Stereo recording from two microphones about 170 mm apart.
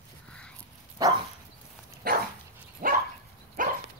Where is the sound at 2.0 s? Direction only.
55° right (ahead or behind).